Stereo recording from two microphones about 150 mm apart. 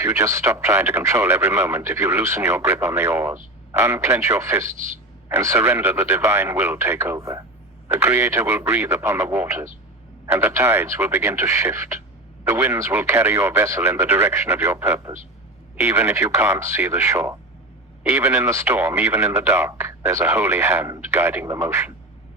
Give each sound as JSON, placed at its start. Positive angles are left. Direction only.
{"t": 0.0, "sound": "speech", "side_deg": -15}